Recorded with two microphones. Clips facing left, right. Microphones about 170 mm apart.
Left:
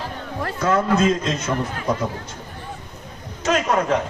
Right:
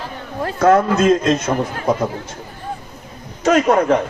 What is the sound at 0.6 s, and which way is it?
Speech, 60° right (ahead or behind).